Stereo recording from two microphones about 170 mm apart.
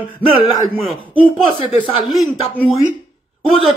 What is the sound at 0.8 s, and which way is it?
Speech, centre (ahead or behind).